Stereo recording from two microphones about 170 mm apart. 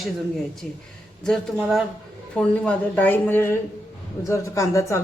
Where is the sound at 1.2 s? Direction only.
Centre (ahead or behind).